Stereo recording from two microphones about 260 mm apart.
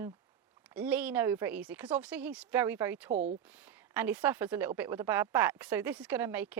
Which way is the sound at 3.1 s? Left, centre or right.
Right.